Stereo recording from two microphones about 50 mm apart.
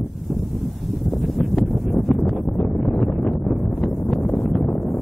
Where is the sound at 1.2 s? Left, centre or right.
Centre.